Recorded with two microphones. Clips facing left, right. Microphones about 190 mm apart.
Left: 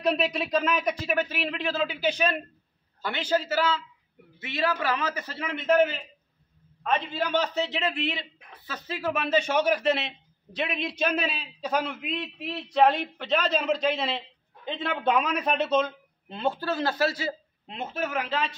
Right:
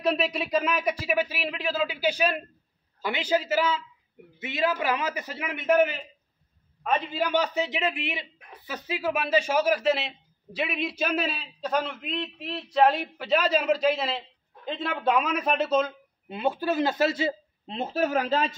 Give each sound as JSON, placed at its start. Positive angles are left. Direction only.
{"t": 0.0, "sound": "a man's voice", "side_deg": -5}